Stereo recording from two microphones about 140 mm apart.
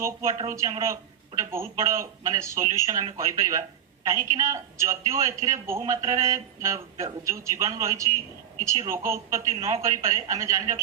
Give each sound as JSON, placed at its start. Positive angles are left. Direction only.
{"t": 0.0, "sound": "a woman's voice", "side_deg": -20}